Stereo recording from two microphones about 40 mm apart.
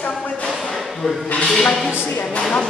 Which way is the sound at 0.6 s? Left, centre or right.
Centre.